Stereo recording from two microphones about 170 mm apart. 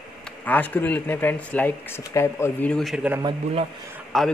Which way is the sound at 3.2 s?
30° right (ahead or behind).